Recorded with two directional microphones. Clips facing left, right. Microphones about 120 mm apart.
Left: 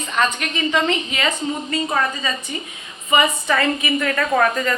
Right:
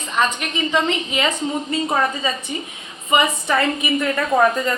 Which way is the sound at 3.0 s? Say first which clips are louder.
Even; 25° right (ahead or behind).